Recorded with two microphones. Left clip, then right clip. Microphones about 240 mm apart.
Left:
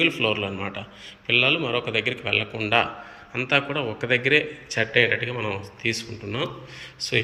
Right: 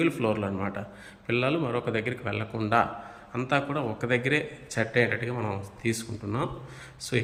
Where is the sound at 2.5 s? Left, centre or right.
Centre.